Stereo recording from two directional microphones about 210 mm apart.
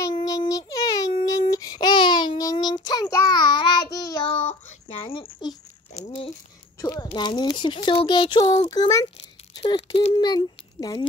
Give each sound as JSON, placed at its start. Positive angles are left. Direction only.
{"t": 0.0, "sound": "child singing", "side_deg": 15}
{"t": 5.9, "sound": "speech", "side_deg": 25}